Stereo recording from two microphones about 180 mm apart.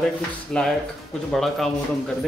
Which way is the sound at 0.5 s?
5° left (ahead or behind).